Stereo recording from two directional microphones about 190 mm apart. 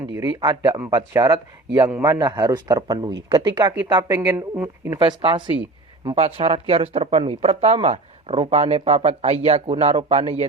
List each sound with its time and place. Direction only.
0.2 s speech: 20° right (ahead or behind)
6.1 s speech: 30° right (ahead or behind)